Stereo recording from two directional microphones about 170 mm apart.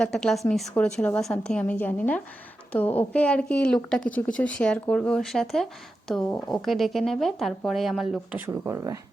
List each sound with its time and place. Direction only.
0.0 s a woman's voice: 5° left (ahead or behind)
8.4 s speech: 15° right (ahead or behind)